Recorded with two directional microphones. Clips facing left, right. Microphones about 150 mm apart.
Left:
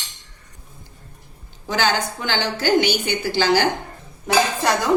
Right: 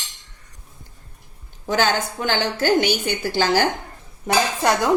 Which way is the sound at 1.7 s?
50° right (ahead or behind).